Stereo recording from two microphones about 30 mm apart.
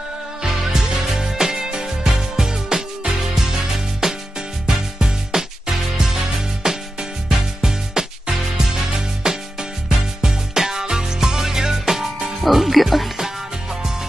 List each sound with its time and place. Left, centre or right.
0.5 s music: centre
12.4 s music: centre